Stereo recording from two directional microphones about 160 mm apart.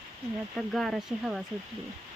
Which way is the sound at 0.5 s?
Centre (ahead or behind).